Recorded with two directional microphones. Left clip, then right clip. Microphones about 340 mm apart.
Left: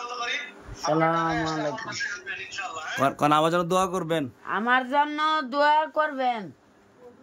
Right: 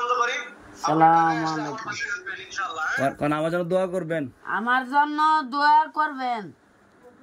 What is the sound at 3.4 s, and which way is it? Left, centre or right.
Speech, left.